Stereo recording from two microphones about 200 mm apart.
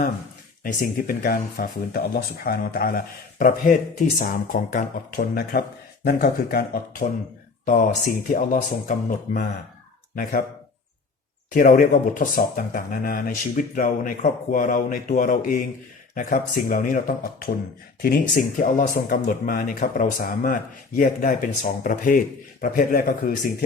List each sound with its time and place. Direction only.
0.6 s speech: 45° left (ahead or behind)
8.3 s speech: 40° left (ahead or behind)
11.5 s speech: 40° left (ahead or behind)